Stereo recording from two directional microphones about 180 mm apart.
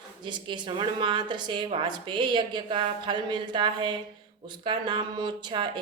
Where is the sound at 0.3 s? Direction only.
25° right (ahead or behind).